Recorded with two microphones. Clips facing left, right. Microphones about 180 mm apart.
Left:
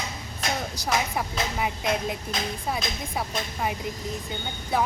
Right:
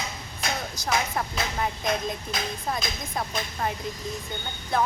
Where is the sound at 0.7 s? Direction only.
10° left (ahead or behind).